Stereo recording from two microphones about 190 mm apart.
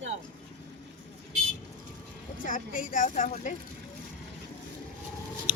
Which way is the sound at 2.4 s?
45° left (ahead or behind).